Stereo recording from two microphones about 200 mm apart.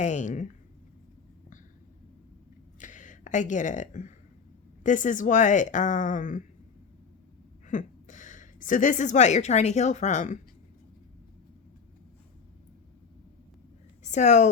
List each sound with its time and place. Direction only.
0.0 s speech: 35° left (ahead or behind)
2.7 s a sound: 40° left (ahead or behind)
4.8 s speech: 40° left (ahead or behind)
7.7 s a woman's voice: 40° left (ahead or behind)
14.0 s a woman's voice: 35° left (ahead or behind)